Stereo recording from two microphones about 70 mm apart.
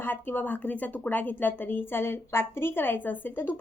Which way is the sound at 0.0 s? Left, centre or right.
Left.